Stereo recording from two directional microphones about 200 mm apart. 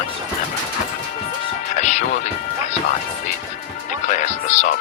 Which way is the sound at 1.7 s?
35° left (ahead or behind).